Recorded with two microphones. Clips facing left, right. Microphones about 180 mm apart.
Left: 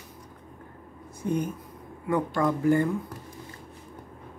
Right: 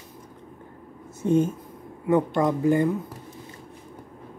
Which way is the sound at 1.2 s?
25° right (ahead or behind).